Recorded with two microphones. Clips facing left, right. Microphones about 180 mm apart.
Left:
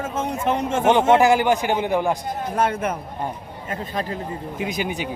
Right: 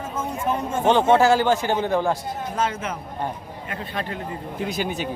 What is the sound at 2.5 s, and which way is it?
Speech, 60° left (ahead or behind).